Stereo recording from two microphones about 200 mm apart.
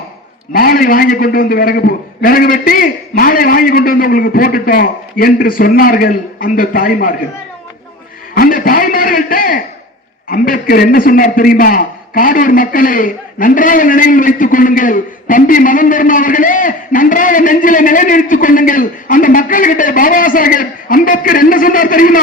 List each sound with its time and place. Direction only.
0.5 s a man's voice: 45° left (ahead or behind)
8.4 s a sound: 45° left (ahead or behind)
10.2 s a man's voice: 45° left (ahead or behind)